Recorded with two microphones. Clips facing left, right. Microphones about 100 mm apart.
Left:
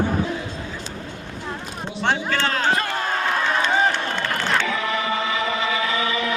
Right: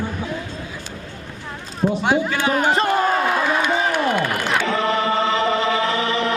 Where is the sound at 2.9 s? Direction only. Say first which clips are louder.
Right 6 dB; 5° right (ahead or behind).